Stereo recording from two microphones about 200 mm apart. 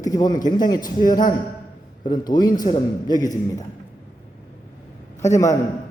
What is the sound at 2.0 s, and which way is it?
A woman's voice, 20° left (ahead or behind).